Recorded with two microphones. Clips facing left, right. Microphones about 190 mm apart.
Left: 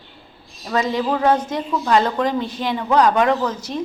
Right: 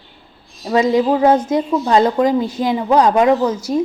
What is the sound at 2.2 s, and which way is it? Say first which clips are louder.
Speech: right 6 dB; 15° right (ahead or behind).